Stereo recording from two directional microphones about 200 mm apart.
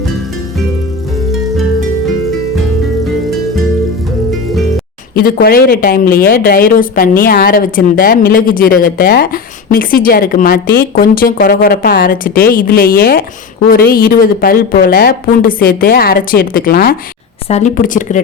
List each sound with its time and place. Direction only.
5.1 s speech: 50° left (ahead or behind)